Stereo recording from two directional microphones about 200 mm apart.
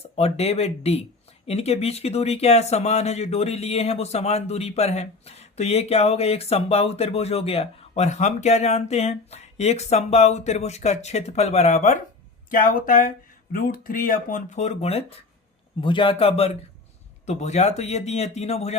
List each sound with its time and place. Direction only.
0.2 s a man's voice: 30° left (ahead or behind)